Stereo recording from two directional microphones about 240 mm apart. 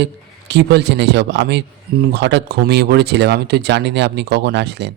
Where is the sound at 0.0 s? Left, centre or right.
Right.